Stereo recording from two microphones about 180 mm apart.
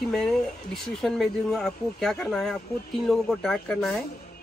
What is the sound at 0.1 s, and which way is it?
Speech, centre (ahead or behind).